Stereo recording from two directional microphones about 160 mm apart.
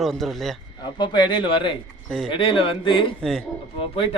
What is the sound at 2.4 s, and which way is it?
Speech, 35° left (ahead or behind).